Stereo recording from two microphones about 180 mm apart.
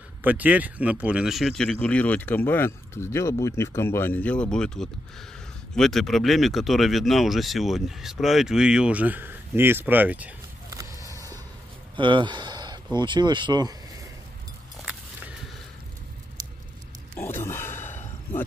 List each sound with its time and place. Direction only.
0.2 s speech: 10° right (ahead or behind)
10.7 s a sound: 15° right (ahead or behind)
12.0 s speech: 25° right (ahead or behind)
17.2 s sigh: 15° left (ahead or behind)